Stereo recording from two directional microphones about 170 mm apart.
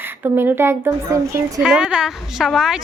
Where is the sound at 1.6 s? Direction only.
5° right (ahead or behind).